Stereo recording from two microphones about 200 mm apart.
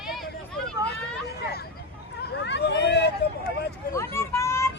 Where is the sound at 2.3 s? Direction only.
60° left (ahead or behind).